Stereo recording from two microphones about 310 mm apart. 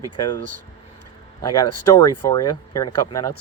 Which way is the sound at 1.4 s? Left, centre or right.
Centre.